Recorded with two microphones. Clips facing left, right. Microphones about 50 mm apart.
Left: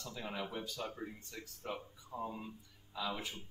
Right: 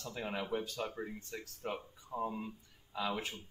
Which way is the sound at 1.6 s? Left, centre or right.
Right.